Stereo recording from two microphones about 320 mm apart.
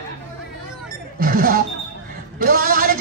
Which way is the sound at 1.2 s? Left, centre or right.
Right.